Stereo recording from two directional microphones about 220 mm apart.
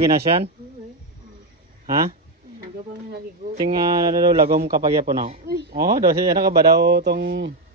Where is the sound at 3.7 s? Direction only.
15° right (ahead or behind).